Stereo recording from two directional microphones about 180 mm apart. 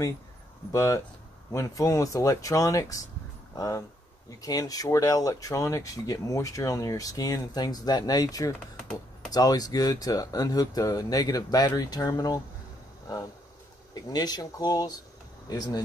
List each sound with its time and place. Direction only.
0.7 s speech: 15° left (ahead or behind)
14.1 s speech: 20° left (ahead or behind)